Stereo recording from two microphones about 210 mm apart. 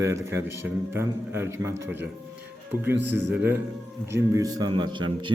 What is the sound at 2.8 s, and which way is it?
A man's voice, 10° right (ahead or behind).